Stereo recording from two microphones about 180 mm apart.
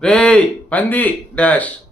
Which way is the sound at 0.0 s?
5° left (ahead or behind).